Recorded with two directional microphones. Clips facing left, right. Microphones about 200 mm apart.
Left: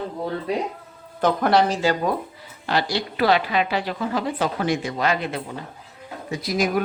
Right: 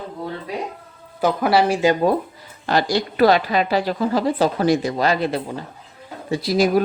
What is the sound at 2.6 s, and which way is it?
A woman's voice, 45° right (ahead or behind).